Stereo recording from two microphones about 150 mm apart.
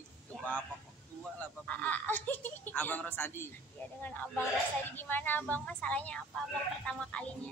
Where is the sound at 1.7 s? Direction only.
10° left (ahead or behind).